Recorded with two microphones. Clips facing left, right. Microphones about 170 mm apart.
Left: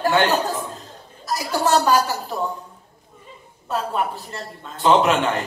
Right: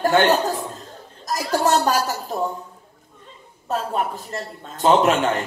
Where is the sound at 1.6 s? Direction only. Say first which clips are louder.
Left 3 dB; 40° right (ahead or behind).